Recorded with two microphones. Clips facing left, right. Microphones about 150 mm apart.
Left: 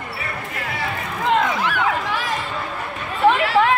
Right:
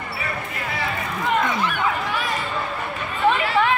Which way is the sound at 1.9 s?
Centre (ahead or behind).